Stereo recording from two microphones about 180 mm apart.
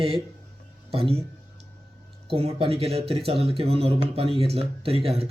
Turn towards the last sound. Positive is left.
turn(degrees=-30)  # may be behind; listen again after turning